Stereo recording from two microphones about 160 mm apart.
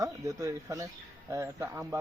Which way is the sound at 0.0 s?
20° right (ahead or behind).